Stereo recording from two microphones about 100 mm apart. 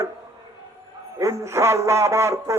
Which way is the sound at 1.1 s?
30° right (ahead or behind).